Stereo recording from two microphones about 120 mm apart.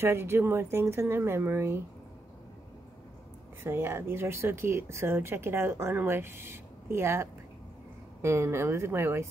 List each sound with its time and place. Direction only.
0.0 s speech: 20° right (ahead or behind)
3.6 s speech: 20° right (ahead or behind)